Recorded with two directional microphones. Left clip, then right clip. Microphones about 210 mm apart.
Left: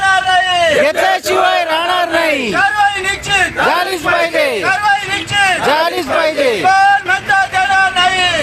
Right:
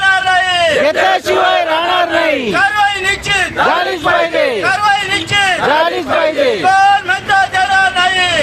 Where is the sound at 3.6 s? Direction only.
Centre (ahead or behind).